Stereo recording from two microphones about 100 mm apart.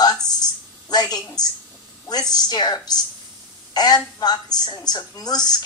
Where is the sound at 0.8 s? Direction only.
40° left (ahead or behind).